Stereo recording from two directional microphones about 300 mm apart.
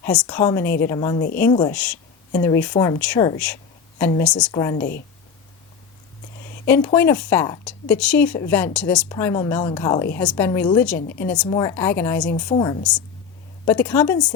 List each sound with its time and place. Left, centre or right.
0.0 s a woman's voice: centre
4.5 s speech: centre
4.8 s speech: left
6.7 s speech: centre